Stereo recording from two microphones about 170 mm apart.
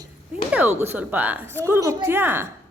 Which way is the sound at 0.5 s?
10° right (ahead or behind).